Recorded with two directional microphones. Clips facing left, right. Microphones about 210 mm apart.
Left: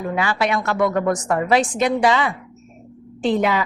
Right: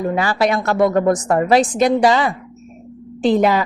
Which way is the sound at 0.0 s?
40° right (ahead or behind).